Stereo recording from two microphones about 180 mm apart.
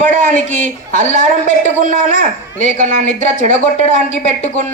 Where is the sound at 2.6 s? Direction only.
40° left (ahead or behind).